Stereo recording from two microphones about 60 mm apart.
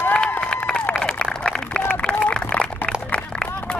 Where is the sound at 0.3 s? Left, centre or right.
Centre.